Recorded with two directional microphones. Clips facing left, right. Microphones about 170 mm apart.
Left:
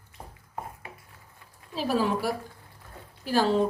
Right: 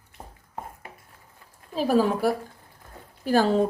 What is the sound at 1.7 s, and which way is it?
Speech, 45° right (ahead or behind).